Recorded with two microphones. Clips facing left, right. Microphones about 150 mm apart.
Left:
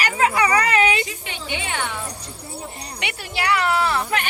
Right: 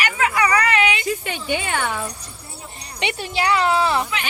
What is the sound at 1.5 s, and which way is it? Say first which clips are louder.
Speech: right 2 dB; 45° right (ahead or behind).